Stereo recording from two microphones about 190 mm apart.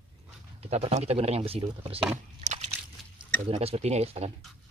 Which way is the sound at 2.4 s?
35° right (ahead or behind).